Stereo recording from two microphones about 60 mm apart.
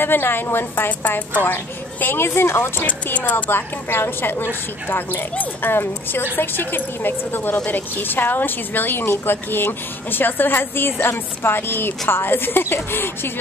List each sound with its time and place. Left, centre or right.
0.0 s a woman's voice: left
2.9 s speech: left
3.4 s a woman's voice: left